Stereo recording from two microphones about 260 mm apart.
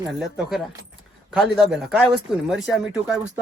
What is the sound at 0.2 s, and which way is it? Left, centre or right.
Speech, centre.